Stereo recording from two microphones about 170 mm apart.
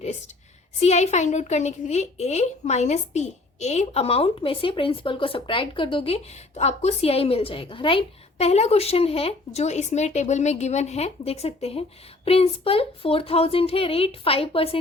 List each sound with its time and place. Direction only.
0.8 s a woman's voice: 40° left (ahead or behind)